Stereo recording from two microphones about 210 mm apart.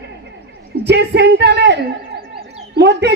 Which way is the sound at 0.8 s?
50° right (ahead or behind).